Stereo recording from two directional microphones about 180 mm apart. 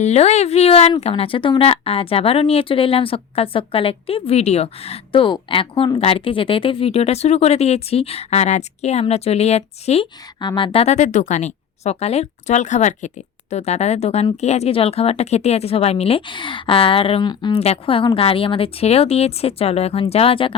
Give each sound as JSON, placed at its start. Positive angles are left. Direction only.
{"t": 0.0, "sound": "speech", "side_deg": 35}